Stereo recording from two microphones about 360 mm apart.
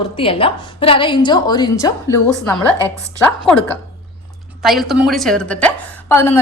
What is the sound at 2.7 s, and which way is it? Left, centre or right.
Speech, centre.